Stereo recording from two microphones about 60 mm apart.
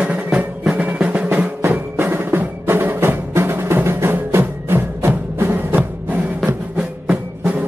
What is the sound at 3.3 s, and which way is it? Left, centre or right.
Music, right.